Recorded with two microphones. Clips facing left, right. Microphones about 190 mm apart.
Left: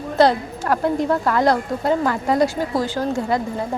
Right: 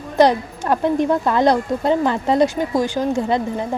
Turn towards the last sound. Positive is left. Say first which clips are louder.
# right 2 dB
turn(degrees=-20)  # may be behind; listen again after turning